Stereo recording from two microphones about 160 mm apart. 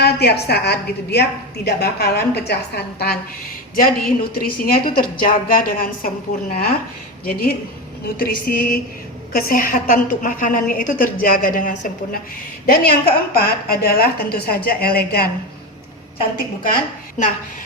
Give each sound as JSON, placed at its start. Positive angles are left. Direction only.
{"t": 0.0, "sound": "a woman's voice", "side_deg": 90}
{"t": 3.8, "sound": "a woman's voice", "side_deg": 65}